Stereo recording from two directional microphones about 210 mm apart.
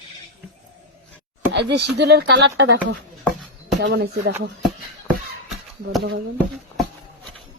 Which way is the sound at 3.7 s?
55° right (ahead or behind).